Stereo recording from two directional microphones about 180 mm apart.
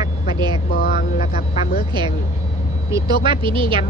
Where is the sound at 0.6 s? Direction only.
55° left (ahead or behind).